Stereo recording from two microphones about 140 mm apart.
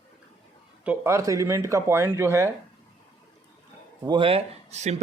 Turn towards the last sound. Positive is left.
turn(degrees=-55)  # may be behind; listen again after turning